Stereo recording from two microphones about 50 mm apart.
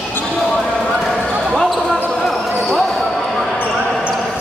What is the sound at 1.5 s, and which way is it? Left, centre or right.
Basketball bounce, centre.